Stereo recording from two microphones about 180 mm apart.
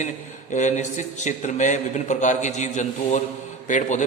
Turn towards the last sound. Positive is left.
turn(degrees=45)  # may be behind; listen again after turning